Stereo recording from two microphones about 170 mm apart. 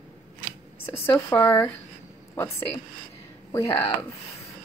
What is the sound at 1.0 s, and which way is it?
Speech, 15° left (ahead or behind).